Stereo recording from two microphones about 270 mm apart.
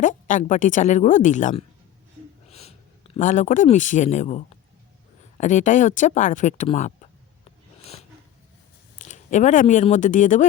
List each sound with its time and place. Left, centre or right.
0.0 s a woman's voice: left
9.0 s speech: left